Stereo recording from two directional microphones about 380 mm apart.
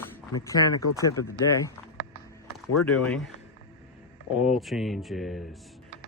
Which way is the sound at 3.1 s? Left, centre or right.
Centre.